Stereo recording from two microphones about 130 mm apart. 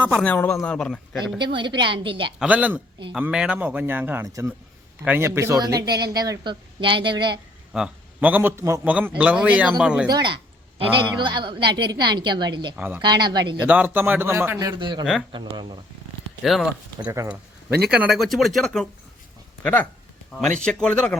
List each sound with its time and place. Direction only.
0.2 s speech: 10° left (ahead or behind)
1.4 s a woman's voice: 35° right (ahead or behind)
2.4 s a man's voice: 10° right (ahead or behind); by 7.3 s 35° right (ahead or behind)
7.7 s a man's voice: 10° right (ahead or behind)
8.8 s speech: 10° right (ahead or behind)
10.1 s a woman's voice: 35° right (ahead or behind)
12.7 s speech: 10° right (ahead or behind)
13.0 s a woman's voice: 35° right (ahead or behind)
13.6 s speech: 10° right (ahead or behind)
14.8 s a woman's voice: 35° right (ahead or behind)
16.4 s speech: centre (ahead or behind)